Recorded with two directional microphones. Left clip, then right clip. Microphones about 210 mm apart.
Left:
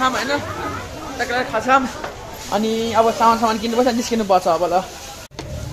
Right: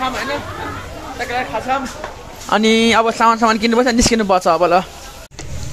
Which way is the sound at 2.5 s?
35° right (ahead or behind).